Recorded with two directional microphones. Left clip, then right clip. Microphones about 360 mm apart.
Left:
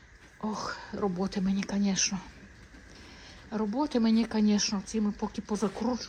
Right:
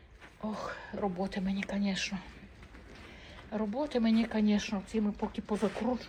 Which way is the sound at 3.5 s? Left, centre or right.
Centre.